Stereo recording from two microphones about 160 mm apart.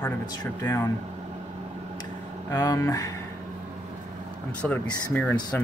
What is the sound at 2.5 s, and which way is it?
Speech, 25° left (ahead or behind).